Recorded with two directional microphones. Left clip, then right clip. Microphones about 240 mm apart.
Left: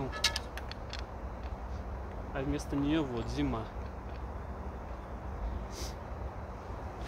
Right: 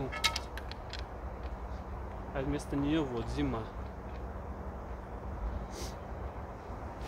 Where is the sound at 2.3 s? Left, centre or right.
Centre.